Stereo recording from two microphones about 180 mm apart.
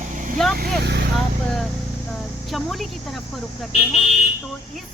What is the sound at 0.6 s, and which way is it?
Speech, 70° right (ahead or behind).